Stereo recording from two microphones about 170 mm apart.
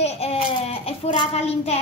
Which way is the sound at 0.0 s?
40° left (ahead or behind).